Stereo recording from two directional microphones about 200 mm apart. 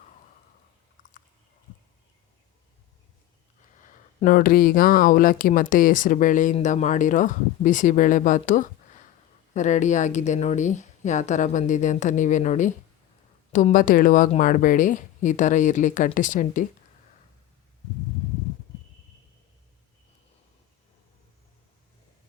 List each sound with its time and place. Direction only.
3.6 s speech: 40° left (ahead or behind)